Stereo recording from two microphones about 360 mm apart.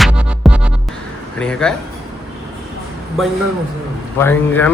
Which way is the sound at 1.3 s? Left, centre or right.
Centre.